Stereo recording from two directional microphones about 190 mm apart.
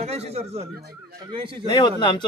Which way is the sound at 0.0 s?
35° right (ahead or behind).